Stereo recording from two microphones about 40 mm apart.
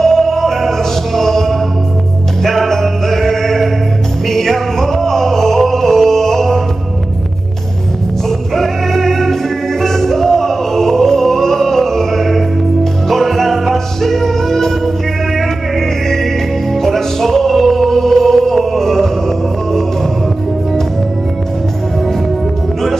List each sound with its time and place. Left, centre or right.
0.0 s music: centre
8.5 s music: centre
16.7 s music: centre